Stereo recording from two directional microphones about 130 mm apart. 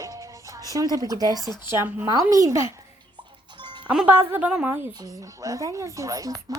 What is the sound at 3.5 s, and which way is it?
Music, 40° right (ahead or behind).